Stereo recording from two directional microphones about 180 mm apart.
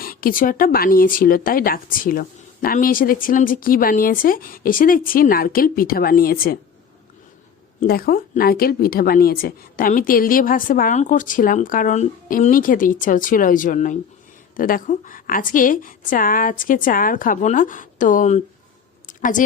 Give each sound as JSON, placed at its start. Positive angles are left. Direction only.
{"t": 0.0, "sound": "speech", "side_deg": 55}
{"t": 7.8, "sound": "speech", "side_deg": 55}
{"t": 19.0, "sound": "a sound", "side_deg": 45}